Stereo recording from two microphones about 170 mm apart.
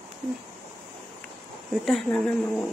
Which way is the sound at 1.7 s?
Centre (ahead or behind).